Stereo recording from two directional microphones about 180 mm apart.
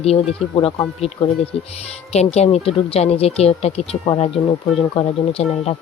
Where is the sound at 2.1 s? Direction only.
35° left (ahead or behind).